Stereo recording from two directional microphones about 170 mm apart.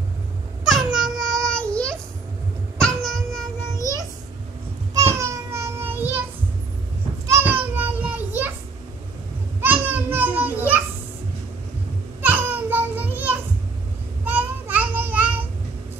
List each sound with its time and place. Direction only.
0.7 s child singing: centre (ahead or behind)
3.0 s music: centre (ahead or behind)
5.0 s child singing: 15° right (ahead or behind)
7.2 s children playing: 15° right (ahead or behind)
9.6 s children playing: 10° right (ahead or behind)
12.2 s a sound: 10° right (ahead or behind)
14.2 s child singing: 10° right (ahead or behind)